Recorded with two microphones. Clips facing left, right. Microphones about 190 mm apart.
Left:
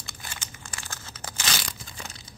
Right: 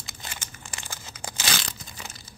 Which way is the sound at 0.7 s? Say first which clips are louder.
Right 1 dB; 10° right (ahead or behind).